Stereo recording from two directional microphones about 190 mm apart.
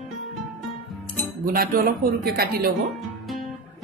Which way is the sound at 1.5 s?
50° right (ahead or behind).